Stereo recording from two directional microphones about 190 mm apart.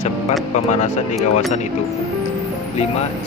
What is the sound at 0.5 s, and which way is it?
Speech, 40° left (ahead or behind).